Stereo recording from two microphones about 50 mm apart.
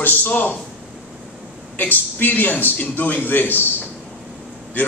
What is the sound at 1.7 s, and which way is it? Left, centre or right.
A man's voice, left.